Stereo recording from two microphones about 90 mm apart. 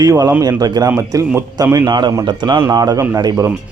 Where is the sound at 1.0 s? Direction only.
35° right (ahead or behind).